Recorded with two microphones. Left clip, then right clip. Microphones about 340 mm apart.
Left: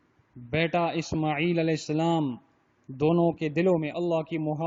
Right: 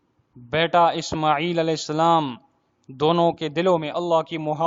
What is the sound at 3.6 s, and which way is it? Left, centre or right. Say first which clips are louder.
Speech: right 5 dB; right.